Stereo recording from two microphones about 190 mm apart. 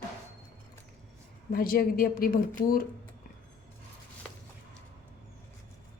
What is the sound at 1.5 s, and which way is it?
Speech, 50° left (ahead or behind).